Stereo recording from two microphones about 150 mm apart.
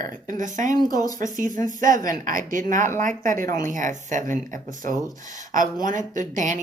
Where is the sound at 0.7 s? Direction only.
25° left (ahead or behind).